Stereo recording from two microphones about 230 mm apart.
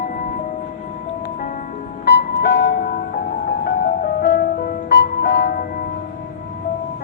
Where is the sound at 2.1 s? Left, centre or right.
Left.